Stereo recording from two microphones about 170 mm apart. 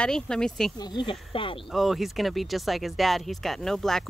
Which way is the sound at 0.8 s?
25° left (ahead or behind).